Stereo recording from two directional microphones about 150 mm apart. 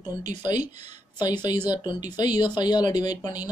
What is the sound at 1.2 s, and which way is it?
Speech, 30° left (ahead or behind).